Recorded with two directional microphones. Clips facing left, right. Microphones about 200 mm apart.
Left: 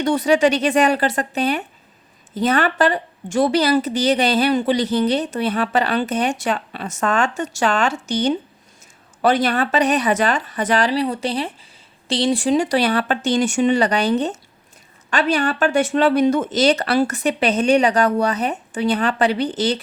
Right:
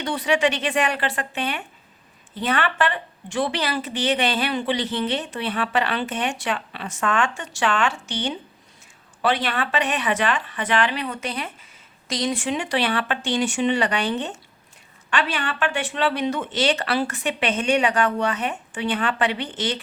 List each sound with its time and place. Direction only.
0.0 s a woman's voice: 45° left (ahead or behind)